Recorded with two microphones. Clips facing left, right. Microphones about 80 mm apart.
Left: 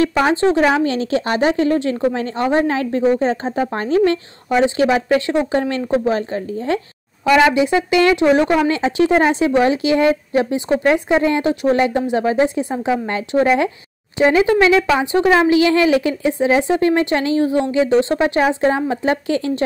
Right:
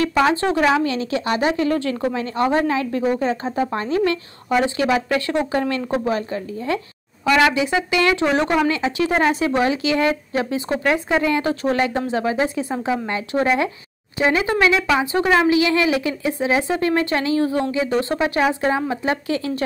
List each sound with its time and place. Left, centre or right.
0.0 s a woman's voice: left
5.3 s a woman's voice: centre
5.6 s speech: left
7.2 s speech: centre
7.9 s speech: left
8.2 s a woman's voice: left
15.5 s a woman's voice: left